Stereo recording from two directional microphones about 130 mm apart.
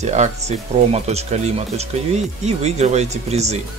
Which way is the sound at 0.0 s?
60° right (ahead or behind).